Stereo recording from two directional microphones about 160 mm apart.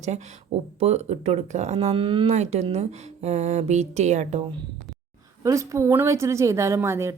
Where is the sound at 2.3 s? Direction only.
40° right (ahead or behind).